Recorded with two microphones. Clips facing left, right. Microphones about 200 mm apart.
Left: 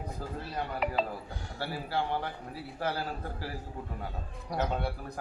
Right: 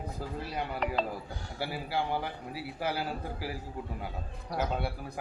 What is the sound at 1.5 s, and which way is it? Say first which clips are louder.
A man's voice: even; 10° right (ahead or behind).